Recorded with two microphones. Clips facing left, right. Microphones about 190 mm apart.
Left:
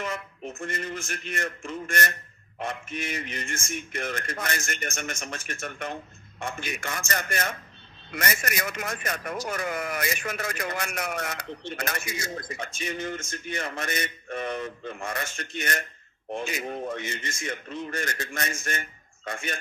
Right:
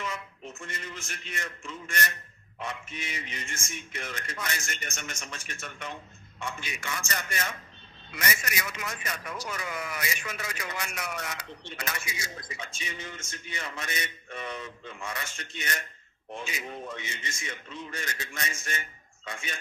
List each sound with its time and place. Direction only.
0.0 s speech: 50° left (ahead or behind)